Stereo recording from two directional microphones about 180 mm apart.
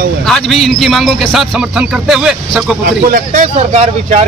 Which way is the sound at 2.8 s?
50° right (ahead or behind).